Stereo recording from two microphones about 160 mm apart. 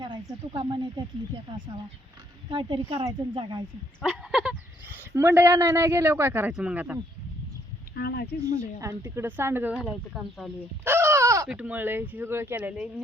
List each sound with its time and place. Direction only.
0.0 s speech: 30° right (ahead or behind)
2.5 s speech: 30° right (ahead or behind)
4.0 s a sound: 5° right (ahead or behind)
5.1 s speech: 15° right (ahead or behind)
7.9 s speech: 85° left
8.4 s speech: 55° left (ahead or behind)
8.8 s speech: 15° right (ahead or behind)
9.7 s speech: centre (ahead or behind)
10.8 s a sound: 15° right (ahead or behind)
11.4 s speech: 5° right (ahead or behind)